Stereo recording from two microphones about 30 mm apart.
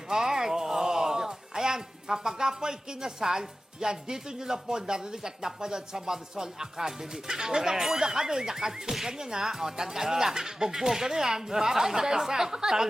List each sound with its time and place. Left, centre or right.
0.1 s speech: centre